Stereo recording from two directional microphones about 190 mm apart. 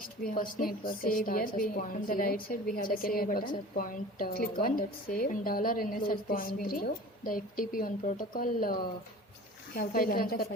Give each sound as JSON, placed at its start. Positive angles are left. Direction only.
{"t": 0.3, "sound": "a woman's voice", "side_deg": 50}
{"t": 9.7, "sound": "a woman's voice", "side_deg": 50}